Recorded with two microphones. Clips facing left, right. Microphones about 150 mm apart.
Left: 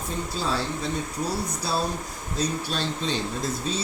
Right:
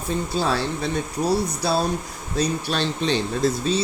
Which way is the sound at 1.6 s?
70° right (ahead or behind).